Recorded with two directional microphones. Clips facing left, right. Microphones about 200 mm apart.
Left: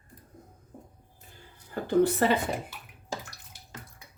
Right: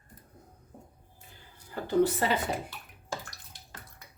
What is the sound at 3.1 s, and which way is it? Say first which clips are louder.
Bathtub: left 1 dB; 15° left (ahead or behind).